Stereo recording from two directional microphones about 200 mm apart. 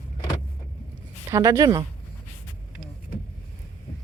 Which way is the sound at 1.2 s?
15° right (ahead or behind).